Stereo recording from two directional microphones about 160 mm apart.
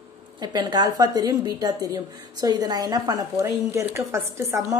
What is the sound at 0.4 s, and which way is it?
A woman's voice, 25° right (ahead or behind).